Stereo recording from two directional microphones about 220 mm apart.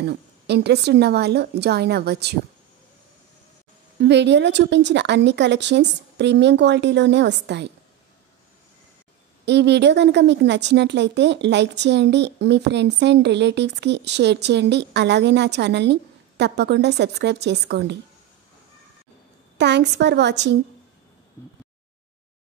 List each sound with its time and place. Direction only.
0.0 s a woman's voice: 50° right (ahead or behind)
4.0 s a woman's voice: 50° right (ahead or behind)
9.5 s a woman's voice: 50° right (ahead or behind)
19.6 s a woman's voice: 50° right (ahead or behind)